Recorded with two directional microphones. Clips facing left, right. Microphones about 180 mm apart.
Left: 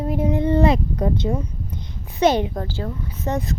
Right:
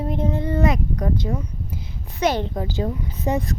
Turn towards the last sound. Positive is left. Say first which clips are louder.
# right 2 dB
turn(degrees=-15)  # may be behind; listen again after turning